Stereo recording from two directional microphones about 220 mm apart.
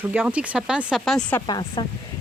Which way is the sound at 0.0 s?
5° right (ahead or behind).